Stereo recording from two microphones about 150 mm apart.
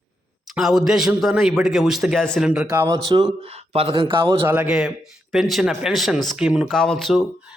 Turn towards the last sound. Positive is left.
turn(degrees=0)  # may be behind; listen again after turning